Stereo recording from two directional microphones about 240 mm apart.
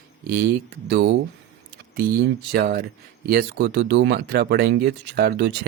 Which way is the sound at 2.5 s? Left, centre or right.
Right.